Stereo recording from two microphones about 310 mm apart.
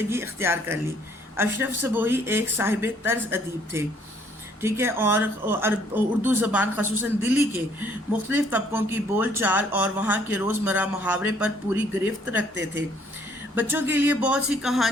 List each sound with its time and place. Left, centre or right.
0.1 s speech: centre